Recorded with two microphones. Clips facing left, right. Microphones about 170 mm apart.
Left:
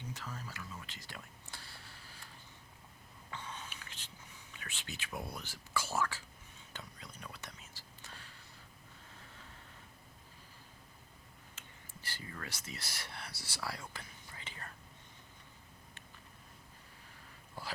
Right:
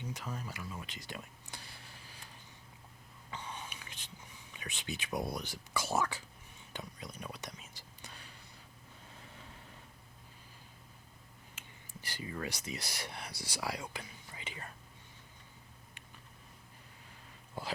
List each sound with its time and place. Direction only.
0.1 s a sound: 15° right (ahead or behind)
3.3 s a sound: 15° right (ahead or behind)
4.5 s speech: 15° right (ahead or behind)
6.7 s whispering: 15° right (ahead or behind)
12.0 s speech: 15° right (ahead or behind)
17.5 s dog: 20° right (ahead or behind)